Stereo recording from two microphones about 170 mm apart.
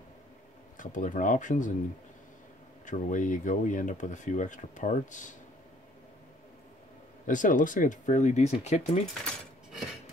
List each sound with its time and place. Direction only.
0.7 s speech: 50° left (ahead or behind)
2.8 s speech: 45° left (ahead or behind)
7.2 s speech: 50° left (ahead or behind)
9.2 s keys jangling: centre (ahead or behind)